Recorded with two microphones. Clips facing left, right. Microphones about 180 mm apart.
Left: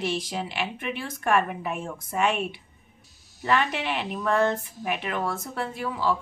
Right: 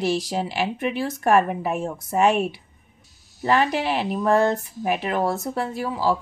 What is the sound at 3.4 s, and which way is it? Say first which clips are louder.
A woman's voice: right 5 dB; 35° right (ahead or behind).